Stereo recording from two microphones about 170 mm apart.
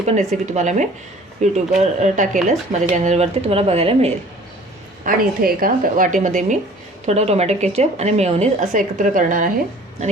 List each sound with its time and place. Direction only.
0.0 s speech: 40° right (ahead or behind)
5.0 s a woman's voice: 60° right (ahead or behind)